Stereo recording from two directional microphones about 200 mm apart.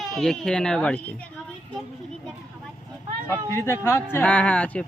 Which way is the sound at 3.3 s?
15° left (ahead or behind).